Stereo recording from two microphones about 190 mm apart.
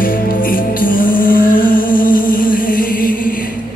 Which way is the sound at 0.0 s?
50° left (ahead or behind).